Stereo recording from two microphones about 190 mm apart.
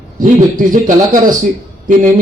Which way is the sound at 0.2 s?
40° right (ahead or behind).